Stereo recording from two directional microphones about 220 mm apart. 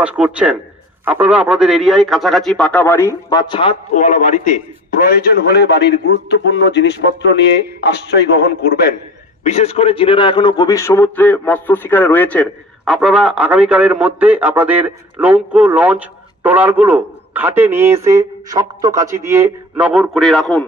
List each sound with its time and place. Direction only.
0.0 s a man's voice: 5° right (ahead or behind); by 7.4 s 55° left (ahead or behind)
9.4 s a man's voice: 30° left (ahead or behind); by 20.6 s centre (ahead or behind)